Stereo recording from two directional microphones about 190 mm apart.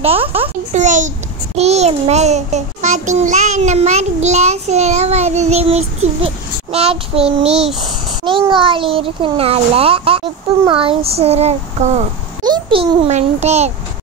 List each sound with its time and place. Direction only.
0.0 s child singing: 30° right (ahead or behind)
8.3 s a child's voice: 25° right (ahead or behind)
10.7 s child singing: 30° right (ahead or behind)
12.4 s a child's voice: 25° right (ahead or behind)